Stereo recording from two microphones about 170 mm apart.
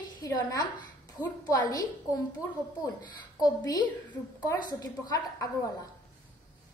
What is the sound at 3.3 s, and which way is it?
A woman's voice, 20° left (ahead or behind).